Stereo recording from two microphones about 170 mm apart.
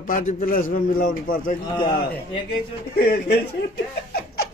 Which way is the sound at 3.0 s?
65° left (ahead or behind).